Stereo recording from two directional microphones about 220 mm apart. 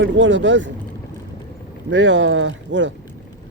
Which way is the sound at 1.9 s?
55° right (ahead or behind).